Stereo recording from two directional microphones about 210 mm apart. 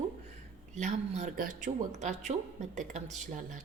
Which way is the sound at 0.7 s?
35° right (ahead or behind).